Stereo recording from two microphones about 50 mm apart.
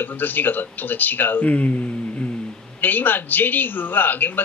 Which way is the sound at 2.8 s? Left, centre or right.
Left.